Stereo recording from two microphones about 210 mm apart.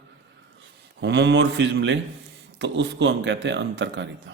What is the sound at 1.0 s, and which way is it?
Speech, 55° right (ahead or behind).